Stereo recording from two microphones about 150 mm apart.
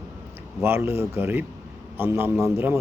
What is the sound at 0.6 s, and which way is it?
A man's voice, 15° right (ahead or behind).